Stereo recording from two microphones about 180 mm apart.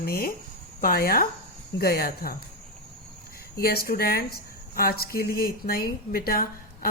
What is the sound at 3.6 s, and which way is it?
A woman's voice, 55° left (ahead or behind).